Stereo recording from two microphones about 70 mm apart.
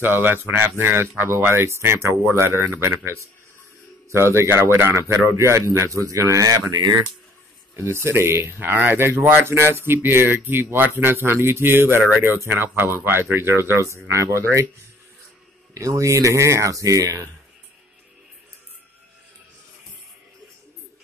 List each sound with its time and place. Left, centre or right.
0.0 s speech: right
7.7 s speech: right
15.7 s speech: right